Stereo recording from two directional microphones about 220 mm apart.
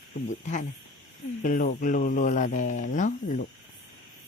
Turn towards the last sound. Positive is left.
turn(degrees=35)  # may be behind; listen again after turning